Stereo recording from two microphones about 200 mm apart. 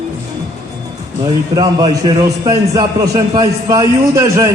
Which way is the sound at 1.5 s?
20° right (ahead or behind).